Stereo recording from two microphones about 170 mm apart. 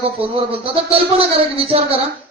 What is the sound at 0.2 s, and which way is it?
A man's voice, 35° right (ahead or behind).